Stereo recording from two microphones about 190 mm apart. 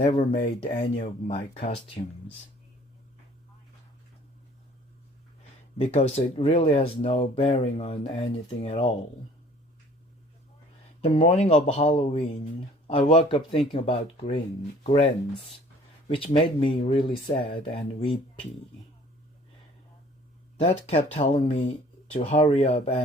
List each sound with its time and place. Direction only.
0.1 s speech: 25° left (ahead or behind)
5.7 s speech: 30° left (ahead or behind)
11.0 s speech: 30° left (ahead or behind)
20.6 s speech: 35° left (ahead or behind)